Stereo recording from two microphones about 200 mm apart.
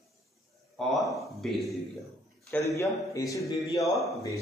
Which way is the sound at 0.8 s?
Centre (ahead or behind).